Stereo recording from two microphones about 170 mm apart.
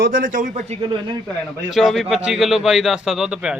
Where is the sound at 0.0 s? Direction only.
55° right (ahead or behind).